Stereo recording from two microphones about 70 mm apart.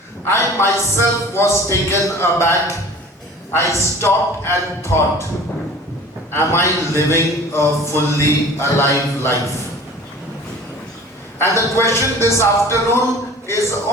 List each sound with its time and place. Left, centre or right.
0.3 s a man's voice: left
6.3 s a man's voice: left
11.3 s a man's voice: left